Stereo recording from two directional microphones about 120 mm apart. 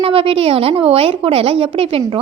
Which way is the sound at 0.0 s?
50° right (ahead or behind).